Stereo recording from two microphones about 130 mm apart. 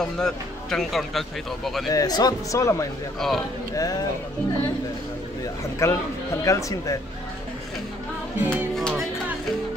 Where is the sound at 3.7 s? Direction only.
30° left (ahead or behind).